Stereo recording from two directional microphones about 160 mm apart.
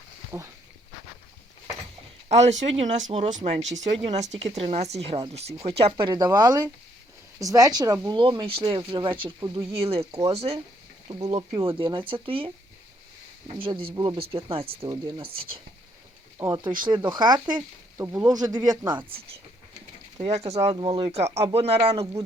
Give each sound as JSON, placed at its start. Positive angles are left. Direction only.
{"t": 0.3, "sound": "speech", "side_deg": -15}
{"t": 2.3, "sound": "speech", "side_deg": -45}
{"t": 13.9, "sound": "speech", "side_deg": -25}
{"t": 14.2, "sound": "speech", "side_deg": -35}
{"t": 14.8, "sound": "speech", "side_deg": -25}
{"t": 16.4, "sound": "speech", "side_deg": -20}
{"t": 20.1, "sound": "speech", "side_deg": -40}
{"t": 20.7, "sound": "speech", "side_deg": -30}